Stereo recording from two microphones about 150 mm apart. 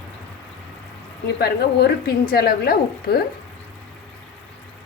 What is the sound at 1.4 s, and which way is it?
Speech, 90° left.